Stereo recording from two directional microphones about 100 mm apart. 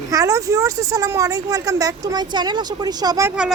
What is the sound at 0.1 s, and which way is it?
Speech, 35° right (ahead or behind).